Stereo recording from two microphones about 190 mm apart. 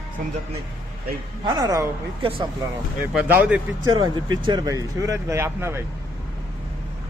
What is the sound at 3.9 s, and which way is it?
Speech, 25° right (ahead or behind).